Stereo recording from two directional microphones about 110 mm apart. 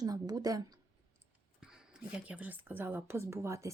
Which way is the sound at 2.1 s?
10° right (ahead or behind).